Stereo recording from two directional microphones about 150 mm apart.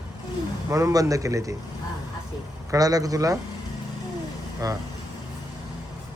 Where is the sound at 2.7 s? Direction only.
25° right (ahead or behind).